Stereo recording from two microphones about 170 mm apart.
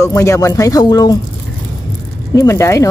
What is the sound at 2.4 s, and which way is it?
Speech, 15° left (ahead or behind).